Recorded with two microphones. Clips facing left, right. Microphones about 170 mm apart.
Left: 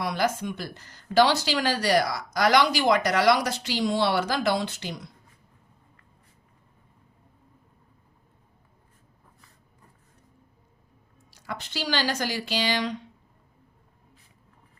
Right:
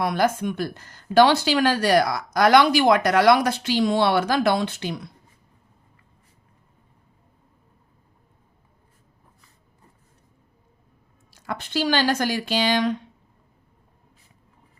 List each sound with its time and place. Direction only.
0.0 s speech: 55° right (ahead or behind)
11.3 s speech: 55° right (ahead or behind)